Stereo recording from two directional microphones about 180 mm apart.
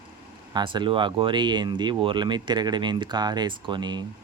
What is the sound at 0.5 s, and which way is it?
Speech, 25° right (ahead or behind).